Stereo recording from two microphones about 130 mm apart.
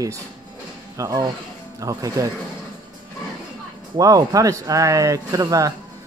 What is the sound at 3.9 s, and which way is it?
Speech, 30° right (ahead or behind).